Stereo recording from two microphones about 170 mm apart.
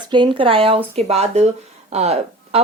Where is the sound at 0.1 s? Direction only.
30° right (ahead or behind).